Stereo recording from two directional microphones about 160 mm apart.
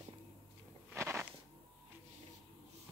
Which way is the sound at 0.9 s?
15° right (ahead or behind).